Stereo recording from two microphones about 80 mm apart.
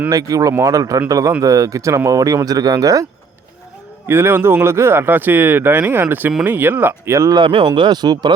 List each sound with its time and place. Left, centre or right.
0.1 s speech: right
4.1 s speech: right
7.3 s speech: right
7.8 s speech: right